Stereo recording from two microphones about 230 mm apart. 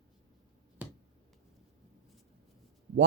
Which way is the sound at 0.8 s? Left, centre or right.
Centre.